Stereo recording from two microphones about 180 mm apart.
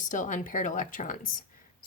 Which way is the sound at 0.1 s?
45° left (ahead or behind).